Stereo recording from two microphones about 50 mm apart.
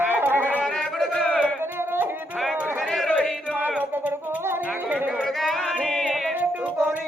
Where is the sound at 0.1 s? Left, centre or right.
Right.